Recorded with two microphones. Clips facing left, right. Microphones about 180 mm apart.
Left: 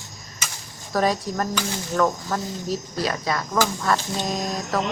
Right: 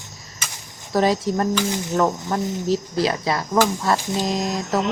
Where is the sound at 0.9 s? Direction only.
25° right (ahead or behind).